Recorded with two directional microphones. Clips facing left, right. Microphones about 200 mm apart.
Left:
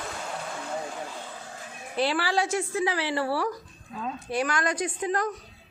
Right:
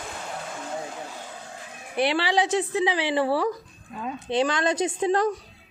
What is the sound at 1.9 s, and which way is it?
Speech, 20° right (ahead or behind).